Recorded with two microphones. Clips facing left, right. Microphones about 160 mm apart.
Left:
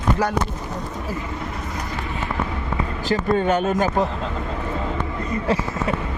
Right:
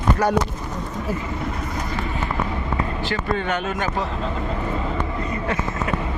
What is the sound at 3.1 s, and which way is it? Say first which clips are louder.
Speech: left 7 dB; 40° left (ahead or behind).